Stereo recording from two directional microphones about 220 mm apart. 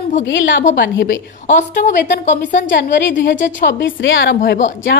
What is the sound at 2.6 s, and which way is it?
A woman's voice, 55° left (ahead or behind).